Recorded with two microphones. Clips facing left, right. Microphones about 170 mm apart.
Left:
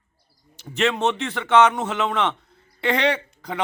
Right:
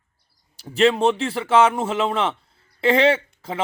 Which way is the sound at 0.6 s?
30° right (ahead or behind).